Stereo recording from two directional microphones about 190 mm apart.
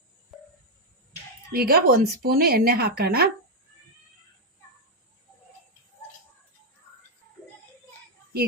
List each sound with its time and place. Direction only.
1.5 s speech: 55° right (ahead or behind)